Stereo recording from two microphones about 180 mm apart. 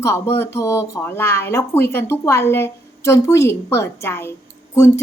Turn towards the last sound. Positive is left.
turn(degrees=15)  # may be behind; listen again after turning